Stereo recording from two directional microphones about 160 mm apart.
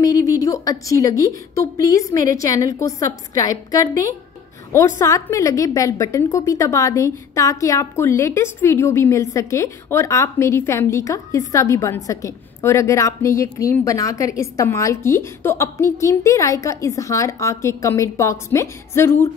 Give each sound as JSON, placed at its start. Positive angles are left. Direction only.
{"t": 0.0, "sound": "a woman's voice", "side_deg": 20}